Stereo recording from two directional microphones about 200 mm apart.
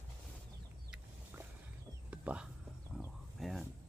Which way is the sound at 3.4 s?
Centre (ahead or behind).